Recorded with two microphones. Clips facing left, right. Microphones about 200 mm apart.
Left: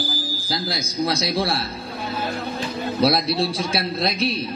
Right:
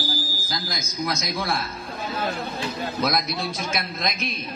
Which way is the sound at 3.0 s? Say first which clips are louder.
Left 7 dB; 30° left (ahead or behind).